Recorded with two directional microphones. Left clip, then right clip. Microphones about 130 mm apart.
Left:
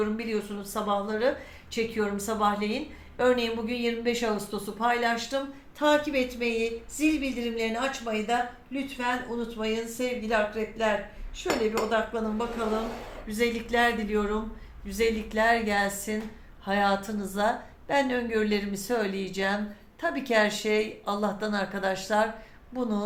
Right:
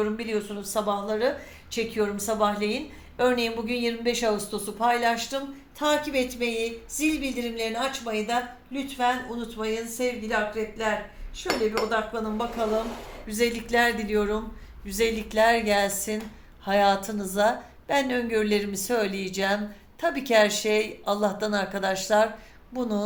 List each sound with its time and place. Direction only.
0.0 s a woman's voice: 30° right (ahead or behind)